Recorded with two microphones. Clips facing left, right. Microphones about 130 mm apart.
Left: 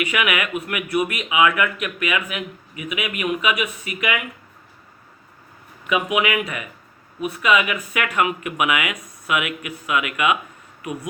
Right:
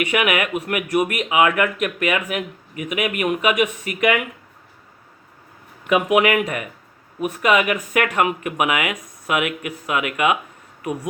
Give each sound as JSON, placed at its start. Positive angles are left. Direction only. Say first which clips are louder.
{"t": 0.0, "sound": "speech", "louder": "right 3 dB", "side_deg": -40}
{"t": 5.9, "sound": "speech", "louder": "right 4 dB", "side_deg": -50}